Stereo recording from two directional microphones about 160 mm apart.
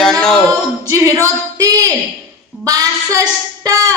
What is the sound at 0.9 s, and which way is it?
A woman's voice, 20° right (ahead or behind).